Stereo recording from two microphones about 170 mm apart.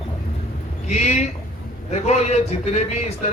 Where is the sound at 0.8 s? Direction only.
40° left (ahead or behind).